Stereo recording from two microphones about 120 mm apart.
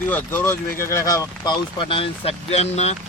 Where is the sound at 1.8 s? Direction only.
45° left (ahead or behind); by 2.9 s 65° left (ahead or behind).